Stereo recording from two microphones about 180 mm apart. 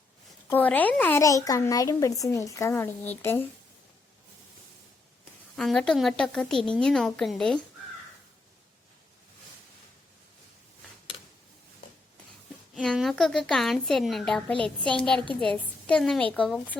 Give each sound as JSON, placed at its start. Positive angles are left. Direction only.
{"t": 0.5, "sound": "speech", "side_deg": 10}
{"t": 5.5, "sound": "a woman's voice", "side_deg": 5}
{"t": 12.7, "sound": "a woman's voice", "side_deg": 0}